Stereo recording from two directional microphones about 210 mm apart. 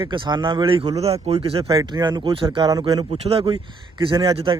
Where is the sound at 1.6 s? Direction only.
15° right (ahead or behind).